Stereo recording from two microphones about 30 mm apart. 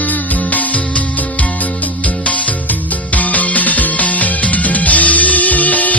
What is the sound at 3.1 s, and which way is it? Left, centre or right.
Music, left.